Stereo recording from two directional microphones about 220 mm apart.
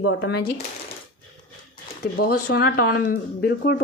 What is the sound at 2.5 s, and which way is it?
A woman's voice, 45° left (ahead or behind).